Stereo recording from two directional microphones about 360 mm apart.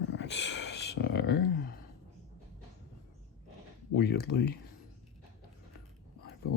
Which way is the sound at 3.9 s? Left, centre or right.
Left.